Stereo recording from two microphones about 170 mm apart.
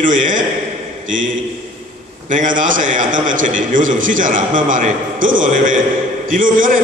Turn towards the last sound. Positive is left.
turn(degrees=-55)  # may be behind; listen again after turning